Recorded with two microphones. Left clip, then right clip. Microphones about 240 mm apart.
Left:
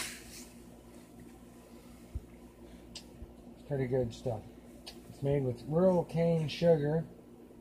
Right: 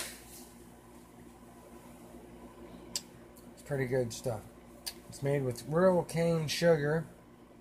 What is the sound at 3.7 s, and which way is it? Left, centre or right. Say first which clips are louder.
Speech: right 1 dB; right.